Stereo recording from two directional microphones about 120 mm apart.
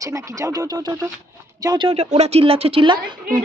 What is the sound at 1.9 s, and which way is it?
A woman's voice, 65° right (ahead or behind).